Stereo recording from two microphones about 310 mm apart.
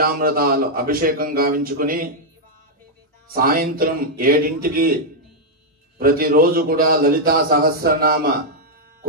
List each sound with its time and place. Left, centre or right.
0.0 s a man's voice: right
3.3 s a man's voice: right
5.9 s a man's voice: right